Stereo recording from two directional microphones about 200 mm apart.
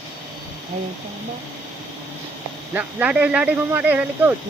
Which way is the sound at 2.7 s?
10° right (ahead or behind).